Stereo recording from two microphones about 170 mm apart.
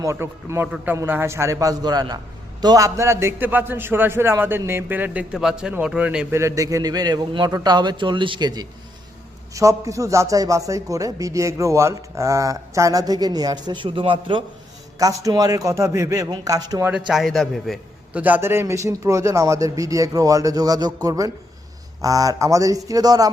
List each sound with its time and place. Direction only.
0.0 s a man's voice: 15° right (ahead or behind)
17.1 s a man's voice: centre (ahead or behind)
18.2 s speech: 10° right (ahead or behind)